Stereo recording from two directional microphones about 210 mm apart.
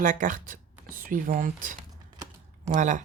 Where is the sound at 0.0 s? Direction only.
35° right (ahead or behind).